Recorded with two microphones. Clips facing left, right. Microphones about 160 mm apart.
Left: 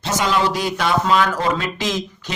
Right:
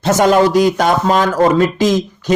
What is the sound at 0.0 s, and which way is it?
Speech, 50° right (ahead or behind).